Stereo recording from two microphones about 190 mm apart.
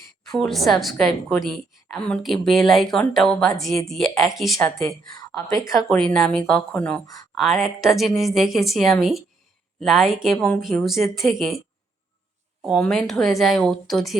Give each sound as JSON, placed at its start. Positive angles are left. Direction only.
{"t": 0.3, "sound": "a woman's voice", "side_deg": 0}
{"t": 5.1, "sound": "a woman's voice", "side_deg": 15}
{"t": 5.6, "sound": "a woman's voice", "side_deg": 0}
{"t": 12.6, "sound": "a woman's voice", "side_deg": 0}